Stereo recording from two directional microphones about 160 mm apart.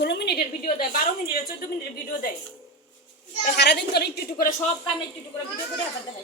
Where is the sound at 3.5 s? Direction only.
90° left; by 4.5 s 70° left (ahead or behind).